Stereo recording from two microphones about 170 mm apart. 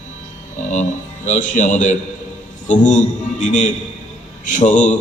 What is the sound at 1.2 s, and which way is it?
A man's voice, 45° left (ahead or behind).